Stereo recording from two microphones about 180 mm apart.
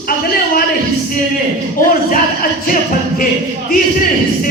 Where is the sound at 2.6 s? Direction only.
50° left (ahead or behind).